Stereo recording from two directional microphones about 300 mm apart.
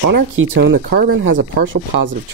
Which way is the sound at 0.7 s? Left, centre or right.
Right.